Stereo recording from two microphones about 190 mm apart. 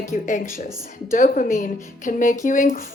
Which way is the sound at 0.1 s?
40° left (ahead or behind).